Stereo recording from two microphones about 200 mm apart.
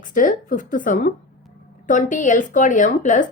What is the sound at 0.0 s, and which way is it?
Speech, 40° left (ahead or behind).